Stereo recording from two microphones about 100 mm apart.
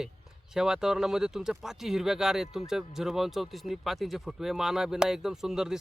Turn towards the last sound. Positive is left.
turn(degrees=-5)  # may be behind; listen again after turning